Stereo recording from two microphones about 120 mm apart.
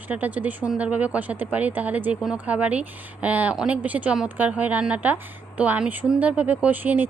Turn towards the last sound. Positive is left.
turn(degrees=-15)  # may be behind; listen again after turning